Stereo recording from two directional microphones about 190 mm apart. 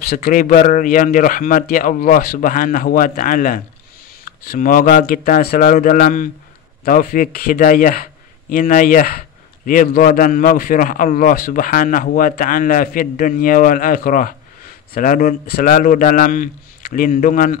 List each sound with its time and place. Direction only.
0.0 s a man's voice: 50° left (ahead or behind)